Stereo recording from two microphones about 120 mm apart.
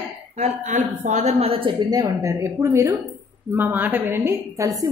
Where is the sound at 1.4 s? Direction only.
50° right (ahead or behind).